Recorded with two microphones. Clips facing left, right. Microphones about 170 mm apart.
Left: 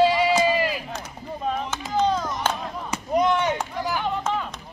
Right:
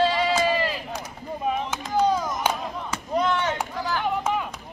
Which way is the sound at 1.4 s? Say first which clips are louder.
Right 1 dB; 10° right (ahead or behind).